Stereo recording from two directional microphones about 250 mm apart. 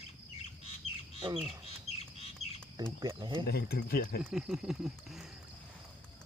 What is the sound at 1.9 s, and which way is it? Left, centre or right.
Bird, left.